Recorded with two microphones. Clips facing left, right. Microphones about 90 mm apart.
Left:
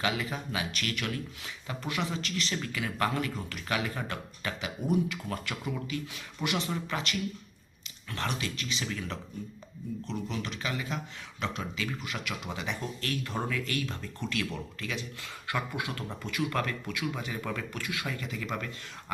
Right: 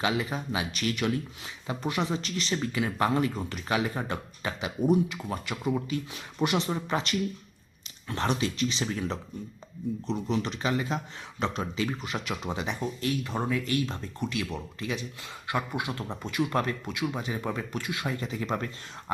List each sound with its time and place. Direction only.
0.0 s speech: 20° right (ahead or behind)